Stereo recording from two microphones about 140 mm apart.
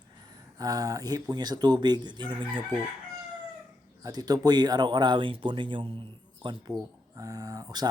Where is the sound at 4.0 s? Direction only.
25° right (ahead or behind).